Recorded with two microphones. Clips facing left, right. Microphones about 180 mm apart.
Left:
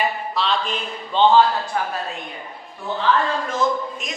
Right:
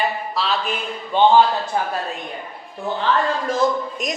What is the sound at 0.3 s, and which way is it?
Speech, 5° right (ahead or behind).